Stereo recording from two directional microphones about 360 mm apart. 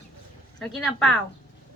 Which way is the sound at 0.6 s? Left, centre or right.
Centre.